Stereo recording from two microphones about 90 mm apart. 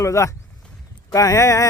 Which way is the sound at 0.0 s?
35° left (ahead or behind).